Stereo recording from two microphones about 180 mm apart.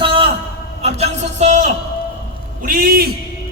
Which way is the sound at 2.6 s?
55° right (ahead or behind).